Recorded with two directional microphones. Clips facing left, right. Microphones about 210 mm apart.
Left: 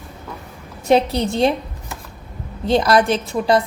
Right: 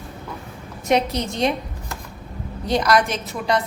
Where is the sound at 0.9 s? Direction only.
30° left (ahead or behind).